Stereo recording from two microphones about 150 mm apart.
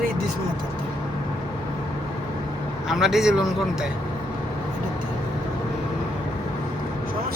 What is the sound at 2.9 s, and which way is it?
Speech, centre (ahead or behind).